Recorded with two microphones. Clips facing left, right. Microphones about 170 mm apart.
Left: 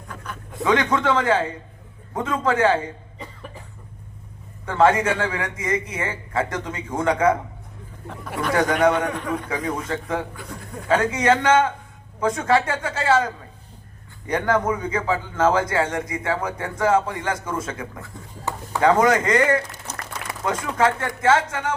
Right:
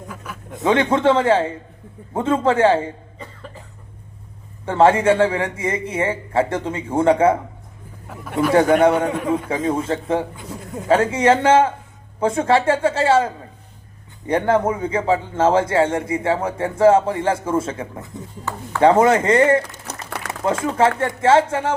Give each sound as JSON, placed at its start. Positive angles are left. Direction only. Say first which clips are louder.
{"t": 0.5, "sound": "a man's voice", "louder": "right 3 dB", "side_deg": -25}
{"t": 3.2, "sound": "cough", "louder": "right 1 dB", "side_deg": 10}
{"t": 4.6, "sound": "a man's voice", "louder": "right 4 dB", "side_deg": -30}
{"t": 8.0, "sound": "speech", "louder": "right 6 dB", "side_deg": -5}
{"t": 9.0, "sound": "a man's voice", "louder": "right 5 dB", "side_deg": -25}
{"t": 19.9, "sound": "a sound", "louder": "right 4 dB", "side_deg": -65}
{"t": 20.4, "sound": "a man's voice", "louder": "right 4 dB", "side_deg": -30}